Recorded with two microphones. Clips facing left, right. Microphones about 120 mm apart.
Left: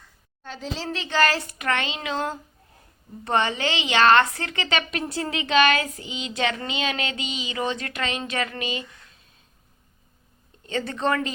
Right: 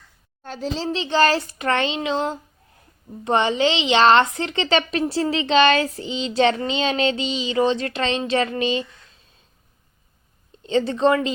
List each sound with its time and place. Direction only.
0.4 s a woman's voice: 40° right (ahead or behind)
0.9 s a woman's voice: 30° right (ahead or behind)
10.6 s a woman's voice: 25° right (ahead or behind)